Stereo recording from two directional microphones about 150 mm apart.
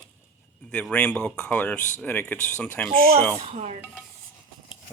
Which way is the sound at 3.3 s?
45° right (ahead or behind).